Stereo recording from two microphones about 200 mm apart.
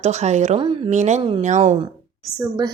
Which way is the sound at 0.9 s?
35° right (ahead or behind).